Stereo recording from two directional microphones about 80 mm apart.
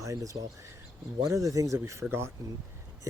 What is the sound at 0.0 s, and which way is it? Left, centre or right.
Speech, right.